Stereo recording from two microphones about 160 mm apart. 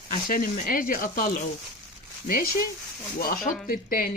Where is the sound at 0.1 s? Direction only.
60° left (ahead or behind).